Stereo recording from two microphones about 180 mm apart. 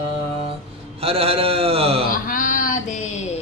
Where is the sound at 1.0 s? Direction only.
30° right (ahead or behind).